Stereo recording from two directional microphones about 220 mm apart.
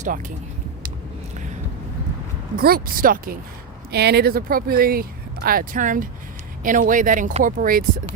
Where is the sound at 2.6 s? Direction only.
40° right (ahead or behind).